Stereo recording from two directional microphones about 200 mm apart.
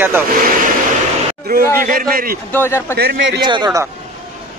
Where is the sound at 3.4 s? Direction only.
20° right (ahead or behind).